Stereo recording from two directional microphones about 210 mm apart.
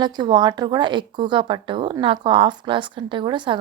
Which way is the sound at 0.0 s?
20° right (ahead or behind).